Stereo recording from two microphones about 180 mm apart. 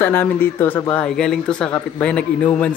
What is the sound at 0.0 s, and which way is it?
A man's voice, 10° left (ahead or behind).